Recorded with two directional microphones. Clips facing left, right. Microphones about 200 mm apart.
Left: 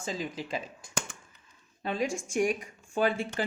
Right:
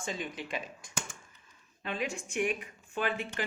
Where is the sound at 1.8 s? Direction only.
40° left (ahead or behind).